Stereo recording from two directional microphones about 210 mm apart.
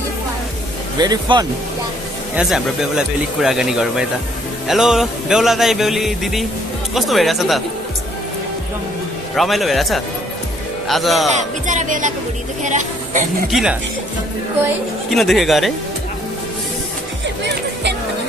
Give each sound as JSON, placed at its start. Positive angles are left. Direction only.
{"t": 0.9, "sound": "speech", "side_deg": -20}
{"t": 2.3, "sound": "music", "side_deg": -5}
{"t": 9.3, "sound": "music", "side_deg": 0}
{"t": 11.2, "sound": "speech", "side_deg": -35}
{"t": 13.5, "sound": "music", "side_deg": 0}
{"t": 15.0, "sound": "music", "side_deg": 0}